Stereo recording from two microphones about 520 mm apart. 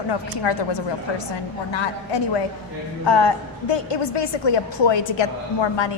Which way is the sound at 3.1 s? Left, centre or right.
Left.